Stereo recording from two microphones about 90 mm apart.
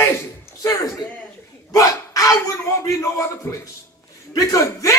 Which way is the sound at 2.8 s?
35° left (ahead or behind).